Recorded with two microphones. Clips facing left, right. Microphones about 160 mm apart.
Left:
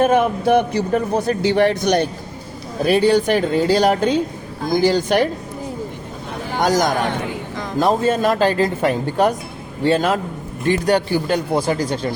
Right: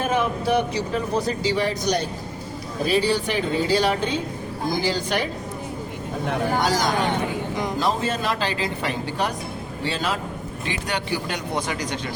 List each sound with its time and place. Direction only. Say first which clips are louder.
0.0 s speech: left 7 dB; 55° left (ahead or behind)
6.6 s speech: left 9 dB; 45° left (ahead or behind)